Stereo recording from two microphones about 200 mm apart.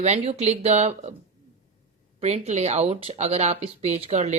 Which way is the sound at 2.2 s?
35° right (ahead or behind).